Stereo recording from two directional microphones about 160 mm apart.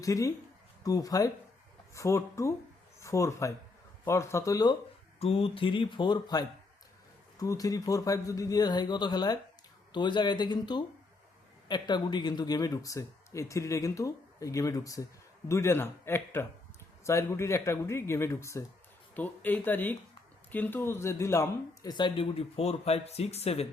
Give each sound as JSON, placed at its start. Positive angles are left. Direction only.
{"t": 0.0, "sound": "speech", "side_deg": 20}
{"t": 5.2, "sound": "speech", "side_deg": 35}